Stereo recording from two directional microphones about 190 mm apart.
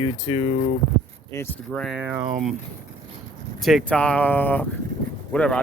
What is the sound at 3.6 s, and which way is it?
Speech, 5° left (ahead or behind).